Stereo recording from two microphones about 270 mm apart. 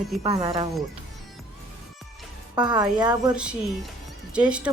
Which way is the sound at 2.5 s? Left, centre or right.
Centre.